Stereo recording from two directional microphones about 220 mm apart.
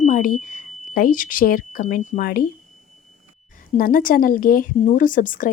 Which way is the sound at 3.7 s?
40° left (ahead or behind).